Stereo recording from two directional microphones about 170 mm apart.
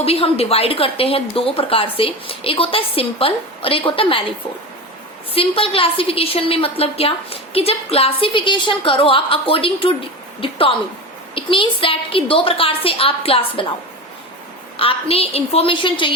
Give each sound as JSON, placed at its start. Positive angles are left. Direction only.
{"t": 0.0, "sound": "a woman's voice", "side_deg": 35}
{"t": 5.3, "sound": "a woman's voice", "side_deg": 35}
{"t": 14.8, "sound": "a woman's voice", "side_deg": 35}